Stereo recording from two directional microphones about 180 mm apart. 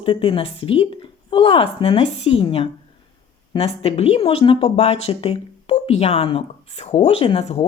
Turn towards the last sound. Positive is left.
turn(degrees=35)  # may be behind; listen again after turning